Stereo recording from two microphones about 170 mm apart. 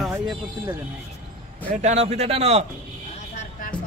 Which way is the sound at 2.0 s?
35° right (ahead or behind).